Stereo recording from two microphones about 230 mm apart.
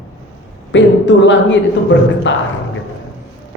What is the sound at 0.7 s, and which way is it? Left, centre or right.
A man's voice, left.